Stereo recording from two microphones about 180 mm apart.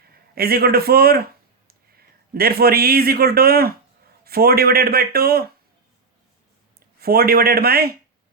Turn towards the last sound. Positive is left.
turn(degrees=-60)  # may be behind; listen again after turning